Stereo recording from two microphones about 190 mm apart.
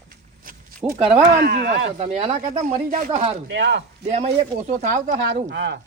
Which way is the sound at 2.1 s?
35° right (ahead or behind).